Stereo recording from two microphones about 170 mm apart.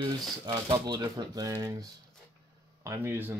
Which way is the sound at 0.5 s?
25° right (ahead or behind).